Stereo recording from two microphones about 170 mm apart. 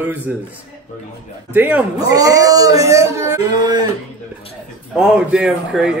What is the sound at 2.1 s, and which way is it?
Speech, 20° right (ahead or behind).